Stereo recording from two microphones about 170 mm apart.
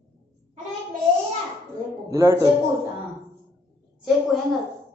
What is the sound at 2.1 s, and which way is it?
Speech, 15° right (ahead or behind).